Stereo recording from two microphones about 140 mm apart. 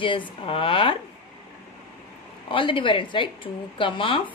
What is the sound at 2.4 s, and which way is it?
Speech, 35° left (ahead or behind).